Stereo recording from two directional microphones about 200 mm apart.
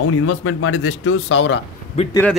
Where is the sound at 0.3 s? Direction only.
85° left; by 1.6 s 65° left (ahead or behind).